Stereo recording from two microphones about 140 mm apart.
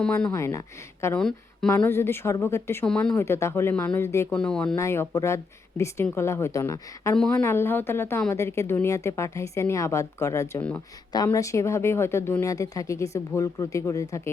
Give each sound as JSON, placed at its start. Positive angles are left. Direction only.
{"t": 0.3, "sound": "speech", "side_deg": 20}
{"t": 1.0, "sound": "speech", "side_deg": 10}
{"t": 2.8, "sound": "speech", "side_deg": 5}
{"t": 3.2, "sound": "speech", "side_deg": 20}
{"t": 4.3, "sound": "speech", "side_deg": 5}
{"t": 4.8, "sound": "speech", "side_deg": 20}
{"t": 10.6, "sound": "speech", "side_deg": 10}
{"t": 11.3, "sound": "speech", "side_deg": 20}